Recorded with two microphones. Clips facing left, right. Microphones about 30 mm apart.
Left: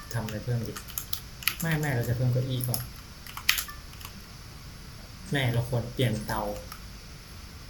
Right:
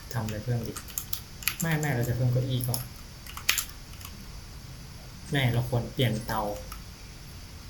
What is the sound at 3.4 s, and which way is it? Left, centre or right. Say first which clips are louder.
Typing: left 2 dB; centre.